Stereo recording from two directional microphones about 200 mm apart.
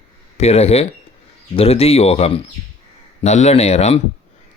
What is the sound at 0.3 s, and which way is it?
Speech, 30° left (ahead or behind).